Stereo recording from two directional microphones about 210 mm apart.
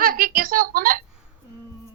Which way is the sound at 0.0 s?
45° right (ahead or behind).